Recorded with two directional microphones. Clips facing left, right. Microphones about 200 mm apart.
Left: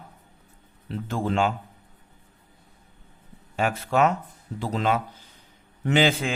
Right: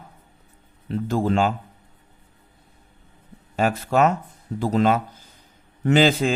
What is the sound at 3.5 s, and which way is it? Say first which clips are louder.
Speech: right 3 dB; 40° right (ahead or behind).